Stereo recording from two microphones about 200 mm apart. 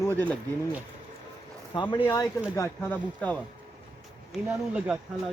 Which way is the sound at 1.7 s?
25° left (ahead or behind).